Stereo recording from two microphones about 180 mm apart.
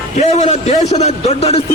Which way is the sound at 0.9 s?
40° left (ahead or behind).